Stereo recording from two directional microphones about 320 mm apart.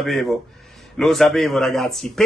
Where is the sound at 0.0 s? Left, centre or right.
Centre.